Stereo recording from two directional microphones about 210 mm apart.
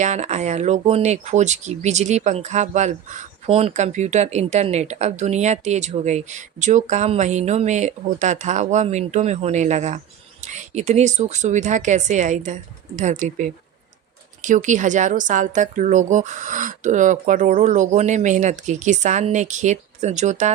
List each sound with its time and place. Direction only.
0.0 s speech: 35° right (ahead or behind)